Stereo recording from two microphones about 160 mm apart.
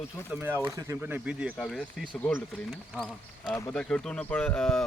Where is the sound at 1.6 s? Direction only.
5° left (ahead or behind).